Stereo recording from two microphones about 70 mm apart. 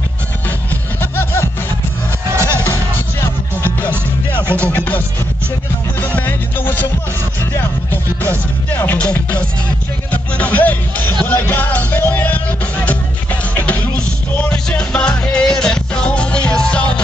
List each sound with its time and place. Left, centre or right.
1.1 s music: left
2.3 s music: right
2.6 s music: left
4.6 s music: left
8.7 s music: centre